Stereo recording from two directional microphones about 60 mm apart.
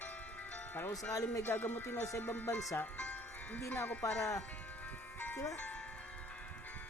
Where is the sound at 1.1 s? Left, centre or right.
Left.